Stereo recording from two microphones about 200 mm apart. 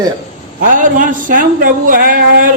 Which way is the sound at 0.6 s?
40° right (ahead or behind).